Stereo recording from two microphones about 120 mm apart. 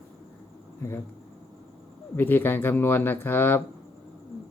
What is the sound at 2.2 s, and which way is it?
Speech, 15° left (ahead or behind).